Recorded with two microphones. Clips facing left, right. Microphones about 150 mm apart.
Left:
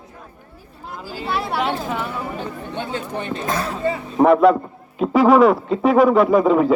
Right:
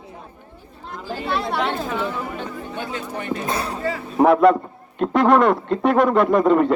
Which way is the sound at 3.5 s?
90° left.